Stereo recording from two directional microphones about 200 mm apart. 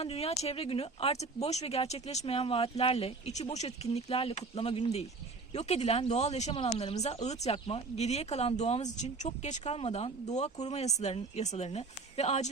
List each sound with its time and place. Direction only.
0.0 s speech: 30° left (ahead or behind)